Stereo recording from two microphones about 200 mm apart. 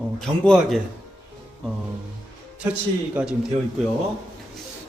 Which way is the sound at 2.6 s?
5° right (ahead or behind).